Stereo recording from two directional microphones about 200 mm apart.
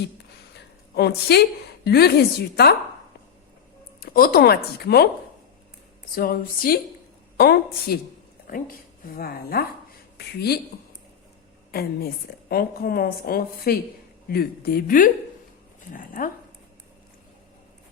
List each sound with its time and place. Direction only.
0.5 s a woman's voice: 55° left (ahead or behind)
4.0 s a woman's voice: 45° left (ahead or behind)
6.1 s a woman's voice: 45° left (ahead or behind)
11.7 s a woman's voice: 50° left (ahead or behind)